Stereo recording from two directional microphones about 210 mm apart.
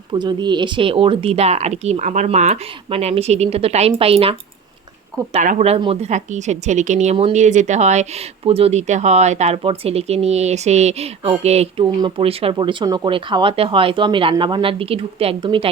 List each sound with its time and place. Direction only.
0.1 s speech: 20° right (ahead or behind)